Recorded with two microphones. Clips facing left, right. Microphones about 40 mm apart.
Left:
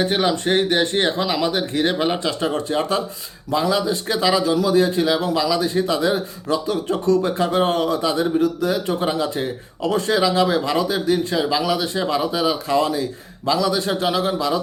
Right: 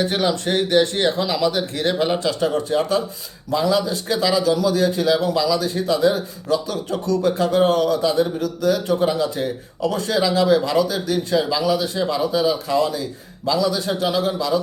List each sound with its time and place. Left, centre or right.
0.0 s speech: centre
2.2 s a man's voice: left
11.6 s a man's voice: left